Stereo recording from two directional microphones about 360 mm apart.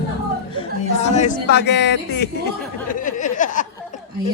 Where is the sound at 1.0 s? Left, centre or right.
Centre.